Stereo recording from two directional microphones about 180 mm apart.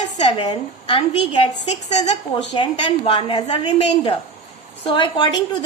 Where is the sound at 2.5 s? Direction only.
25° left (ahead or behind).